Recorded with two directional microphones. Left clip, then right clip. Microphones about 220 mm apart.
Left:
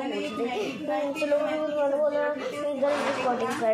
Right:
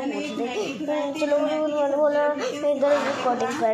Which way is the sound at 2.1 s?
30° right (ahead or behind).